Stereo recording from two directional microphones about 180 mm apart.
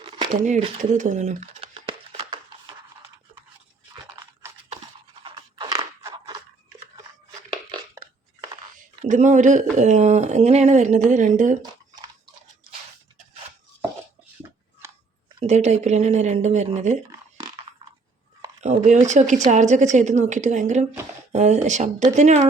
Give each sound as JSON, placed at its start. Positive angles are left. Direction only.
{"t": 0.0, "sound": "a sound", "side_deg": -25}
{"t": 0.4, "sound": "crumpling", "side_deg": -40}
{"t": 5.2, "sound": "crunch", "side_deg": -25}
{"t": 9.0, "sound": "speech", "side_deg": -40}
{"t": 11.6, "sound": "drip", "side_deg": -25}
{"t": 15.4, "sound": "speech", "side_deg": -40}
{"t": 17.1, "sound": "a sound", "side_deg": -25}
{"t": 18.6, "sound": "speech", "side_deg": -40}